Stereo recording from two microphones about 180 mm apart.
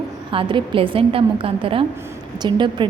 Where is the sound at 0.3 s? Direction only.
30° right (ahead or behind).